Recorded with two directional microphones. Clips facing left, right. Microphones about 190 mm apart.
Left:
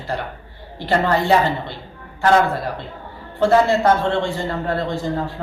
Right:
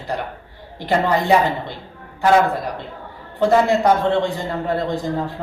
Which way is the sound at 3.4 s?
15° right (ahead or behind).